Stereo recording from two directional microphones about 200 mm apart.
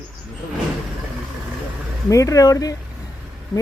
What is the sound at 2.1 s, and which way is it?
Speech, 15° left (ahead or behind).